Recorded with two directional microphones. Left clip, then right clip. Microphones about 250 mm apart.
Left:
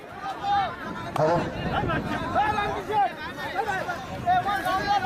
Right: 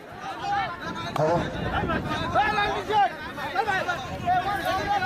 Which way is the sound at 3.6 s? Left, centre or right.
Centre.